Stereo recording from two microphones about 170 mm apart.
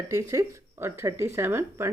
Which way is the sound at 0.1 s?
15° right (ahead or behind).